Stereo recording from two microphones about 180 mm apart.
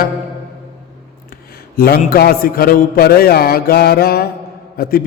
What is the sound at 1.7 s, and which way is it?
A man's voice, 55° left (ahead or behind).